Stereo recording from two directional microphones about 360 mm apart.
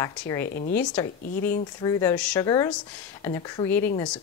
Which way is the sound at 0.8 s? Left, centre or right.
Centre.